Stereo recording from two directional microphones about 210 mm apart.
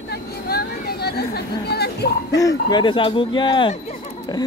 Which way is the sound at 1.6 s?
50° left (ahead or behind).